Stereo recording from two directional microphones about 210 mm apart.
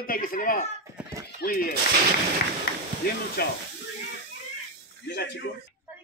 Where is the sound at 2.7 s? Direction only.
45° left (ahead or behind).